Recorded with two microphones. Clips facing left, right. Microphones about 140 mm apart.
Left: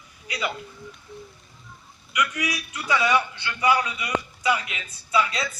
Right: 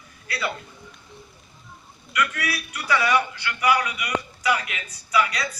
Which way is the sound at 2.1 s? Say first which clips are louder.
Right 1 dB; 15° left (ahead or behind).